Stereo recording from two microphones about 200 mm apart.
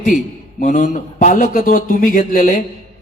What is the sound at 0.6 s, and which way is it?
A man's voice, 40° left (ahead or behind).